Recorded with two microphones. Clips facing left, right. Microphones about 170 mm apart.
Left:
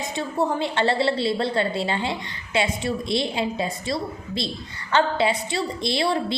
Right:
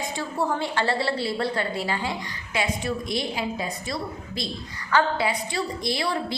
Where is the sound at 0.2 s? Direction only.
25° left (ahead or behind).